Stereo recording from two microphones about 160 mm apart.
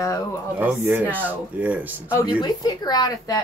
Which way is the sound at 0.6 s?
10° right (ahead or behind).